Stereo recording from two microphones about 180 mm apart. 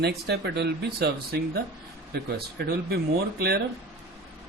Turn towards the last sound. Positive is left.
turn(degrees=-60)  # may be behind; listen again after turning